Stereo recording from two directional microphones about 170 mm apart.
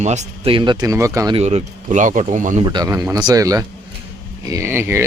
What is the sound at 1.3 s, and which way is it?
Speech, 40° right (ahead or behind).